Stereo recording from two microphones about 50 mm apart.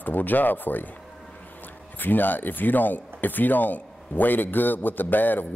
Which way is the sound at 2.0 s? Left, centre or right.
Left.